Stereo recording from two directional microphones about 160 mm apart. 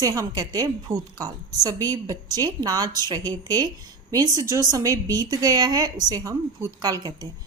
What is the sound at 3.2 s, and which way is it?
Speech, 15° left (ahead or behind).